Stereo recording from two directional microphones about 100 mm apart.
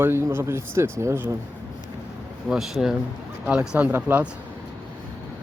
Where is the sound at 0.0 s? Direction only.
25° right (ahead or behind).